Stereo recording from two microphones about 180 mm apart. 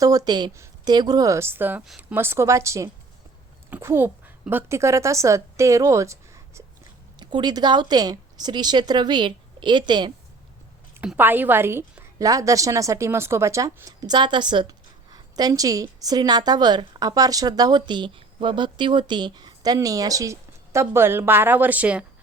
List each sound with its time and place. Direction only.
0.0 s a woman's voice: 20° right (ahead or behind)
10.9 s a woman's voice: 10° right (ahead or behind)